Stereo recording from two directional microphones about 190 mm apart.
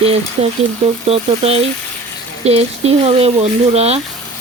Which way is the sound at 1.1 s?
30° right (ahead or behind).